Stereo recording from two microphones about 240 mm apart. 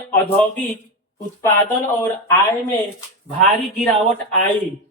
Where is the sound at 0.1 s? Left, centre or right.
Centre.